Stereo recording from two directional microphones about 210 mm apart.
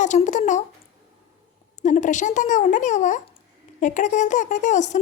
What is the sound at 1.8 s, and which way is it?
Speech, 35° left (ahead or behind).